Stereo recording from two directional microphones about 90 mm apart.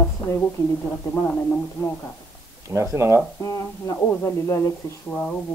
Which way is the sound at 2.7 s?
30° right (ahead or behind).